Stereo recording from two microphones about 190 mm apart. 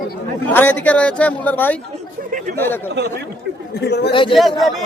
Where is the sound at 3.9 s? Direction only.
60° left (ahead or behind).